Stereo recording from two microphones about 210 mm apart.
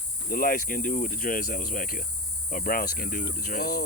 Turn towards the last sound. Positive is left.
turn(degrees=45)  # may be behind; listen again after turning